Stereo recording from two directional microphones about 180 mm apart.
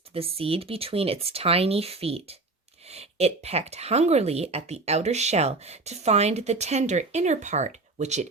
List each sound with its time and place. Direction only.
0.1 s speech: 30° right (ahead or behind)